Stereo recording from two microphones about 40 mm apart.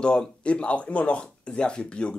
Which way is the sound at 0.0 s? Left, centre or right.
Left.